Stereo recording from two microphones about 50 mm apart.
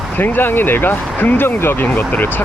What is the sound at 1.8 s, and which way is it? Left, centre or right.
Speech, left.